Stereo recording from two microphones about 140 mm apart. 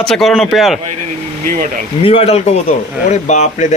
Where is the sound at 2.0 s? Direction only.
45° left (ahead or behind).